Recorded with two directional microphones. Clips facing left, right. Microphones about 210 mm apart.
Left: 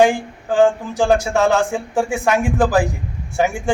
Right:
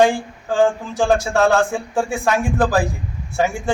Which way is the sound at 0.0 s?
15° left (ahead or behind).